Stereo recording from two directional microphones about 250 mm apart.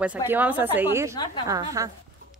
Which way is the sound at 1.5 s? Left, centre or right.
Centre.